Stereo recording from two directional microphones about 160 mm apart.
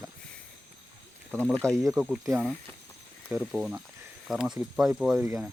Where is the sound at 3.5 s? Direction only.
5° right (ahead or behind).